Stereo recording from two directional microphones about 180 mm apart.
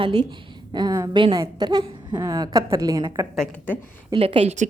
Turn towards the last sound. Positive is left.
turn(degrees=-40)  # may be behind; listen again after turning